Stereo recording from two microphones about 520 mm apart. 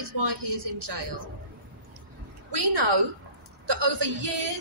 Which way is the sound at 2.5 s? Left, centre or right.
Right.